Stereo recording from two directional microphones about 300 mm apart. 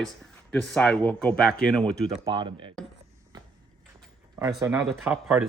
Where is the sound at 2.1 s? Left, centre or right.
Centre.